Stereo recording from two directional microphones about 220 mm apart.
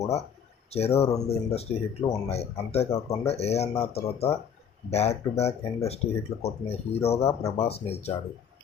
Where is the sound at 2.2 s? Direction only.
30° left (ahead or behind).